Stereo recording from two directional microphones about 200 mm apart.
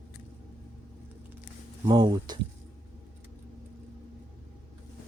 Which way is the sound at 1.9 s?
20° right (ahead or behind).